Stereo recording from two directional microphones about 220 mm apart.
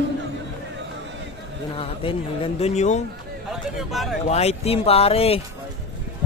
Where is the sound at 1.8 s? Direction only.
25° left (ahead or behind).